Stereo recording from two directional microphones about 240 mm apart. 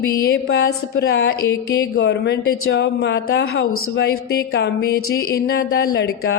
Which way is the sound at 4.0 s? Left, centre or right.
Left.